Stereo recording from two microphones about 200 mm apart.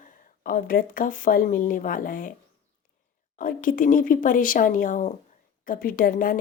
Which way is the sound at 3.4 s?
45° left (ahead or behind).